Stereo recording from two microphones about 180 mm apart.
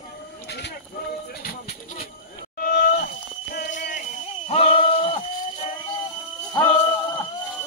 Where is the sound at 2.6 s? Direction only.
60° left (ahead or behind).